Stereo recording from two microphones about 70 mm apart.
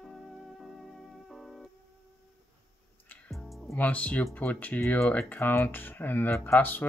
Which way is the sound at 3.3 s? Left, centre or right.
Centre.